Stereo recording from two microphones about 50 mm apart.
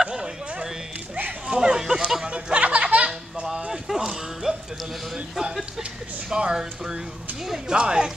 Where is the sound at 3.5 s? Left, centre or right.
Centre.